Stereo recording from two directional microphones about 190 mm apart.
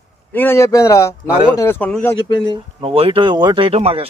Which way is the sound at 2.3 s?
25° left (ahead or behind).